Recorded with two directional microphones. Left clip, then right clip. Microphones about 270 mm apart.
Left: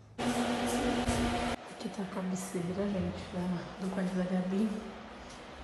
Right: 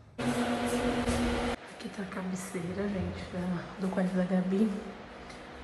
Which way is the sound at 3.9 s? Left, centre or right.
Centre.